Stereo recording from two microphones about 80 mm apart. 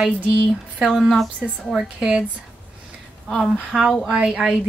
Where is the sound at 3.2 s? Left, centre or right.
Centre.